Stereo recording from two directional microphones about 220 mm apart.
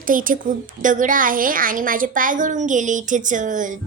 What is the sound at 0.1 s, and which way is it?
A woman's voice, 40° right (ahead or behind).